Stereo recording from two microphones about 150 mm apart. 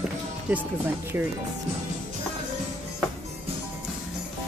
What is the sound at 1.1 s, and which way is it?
Speech, 15° right (ahead or behind).